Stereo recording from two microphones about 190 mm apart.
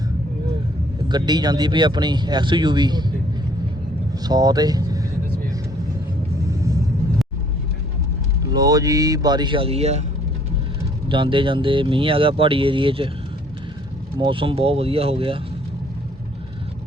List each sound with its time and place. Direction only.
1.0 s speech: 20° right (ahead or behind)
4.3 s speech: 20° right (ahead or behind)
6.5 s vehicle: 15° right (ahead or behind)
8.5 s speech: 20° right (ahead or behind)
11.1 s speech: 25° right (ahead or behind)
14.2 s speech: 25° right (ahead or behind)